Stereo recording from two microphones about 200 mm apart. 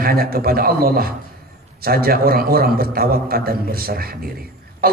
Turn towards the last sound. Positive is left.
turn(degrees=-50)  # may be behind; listen again after turning